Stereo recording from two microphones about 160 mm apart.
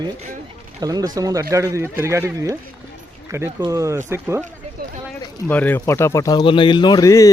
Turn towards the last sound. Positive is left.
turn(degrees=20)  # may be behind; listen again after turning